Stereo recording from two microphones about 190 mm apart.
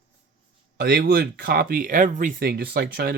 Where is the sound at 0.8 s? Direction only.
55° right (ahead or behind).